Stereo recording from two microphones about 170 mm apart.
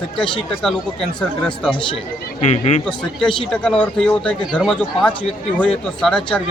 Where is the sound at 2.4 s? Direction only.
40° left (ahead or behind).